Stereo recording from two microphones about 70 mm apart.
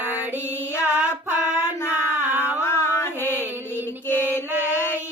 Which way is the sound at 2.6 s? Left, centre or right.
Left.